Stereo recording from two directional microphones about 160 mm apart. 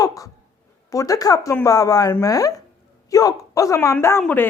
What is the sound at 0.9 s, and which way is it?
A woman's voice, 20° left (ahead or behind).